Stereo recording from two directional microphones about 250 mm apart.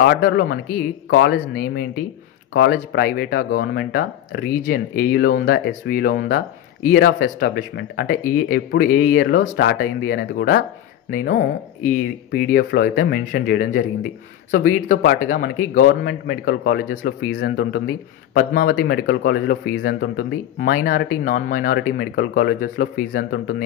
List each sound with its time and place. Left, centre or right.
0.0 s speech: left